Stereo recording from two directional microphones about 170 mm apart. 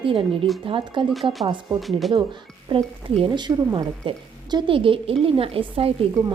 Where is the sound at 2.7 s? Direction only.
30° right (ahead or behind).